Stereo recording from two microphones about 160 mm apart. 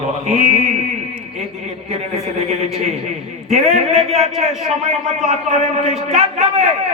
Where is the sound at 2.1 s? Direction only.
45° right (ahead or behind).